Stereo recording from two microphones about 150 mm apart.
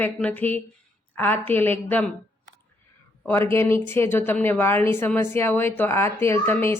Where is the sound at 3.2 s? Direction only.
15° left (ahead or behind).